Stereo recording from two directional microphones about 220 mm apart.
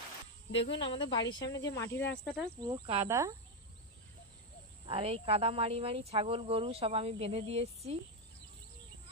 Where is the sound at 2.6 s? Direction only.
25° right (ahead or behind).